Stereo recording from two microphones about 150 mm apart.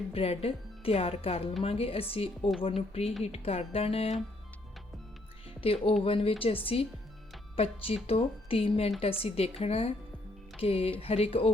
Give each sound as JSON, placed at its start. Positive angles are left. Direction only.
{"t": 0.1, "sound": "speech", "side_deg": 40}
{"t": 5.5, "sound": "speech", "side_deg": 40}